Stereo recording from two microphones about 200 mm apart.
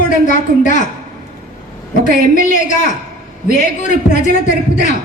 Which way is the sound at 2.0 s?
40° left (ahead or behind).